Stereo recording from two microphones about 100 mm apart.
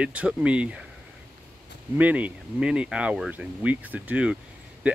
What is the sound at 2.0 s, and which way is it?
Speech, 15° right (ahead or behind).